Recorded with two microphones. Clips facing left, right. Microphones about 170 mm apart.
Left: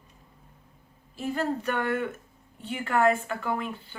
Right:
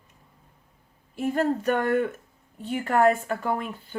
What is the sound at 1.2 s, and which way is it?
Speech, 45° right (ahead or behind).